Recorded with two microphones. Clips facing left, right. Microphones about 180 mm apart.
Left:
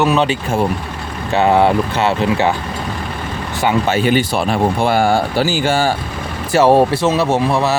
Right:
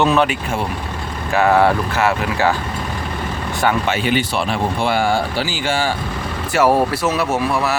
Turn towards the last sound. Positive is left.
turn(degrees=25)  # may be behind; listen again after turning